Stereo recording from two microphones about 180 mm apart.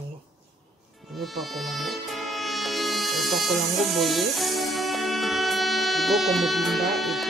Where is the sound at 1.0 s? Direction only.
Centre (ahead or behind).